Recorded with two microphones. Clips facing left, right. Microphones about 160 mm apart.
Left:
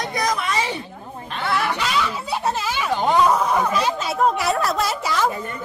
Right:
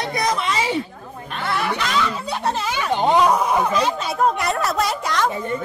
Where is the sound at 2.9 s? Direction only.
20° right (ahead or behind).